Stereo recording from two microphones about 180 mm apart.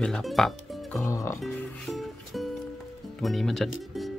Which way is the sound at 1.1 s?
15° left (ahead or behind).